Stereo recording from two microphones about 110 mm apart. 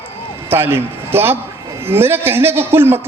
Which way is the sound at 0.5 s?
20° right (ahead or behind).